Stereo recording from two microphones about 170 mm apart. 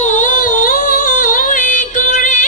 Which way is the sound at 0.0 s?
45° left (ahead or behind).